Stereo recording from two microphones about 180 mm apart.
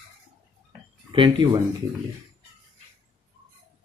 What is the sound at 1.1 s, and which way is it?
Speech, 25° right (ahead or behind).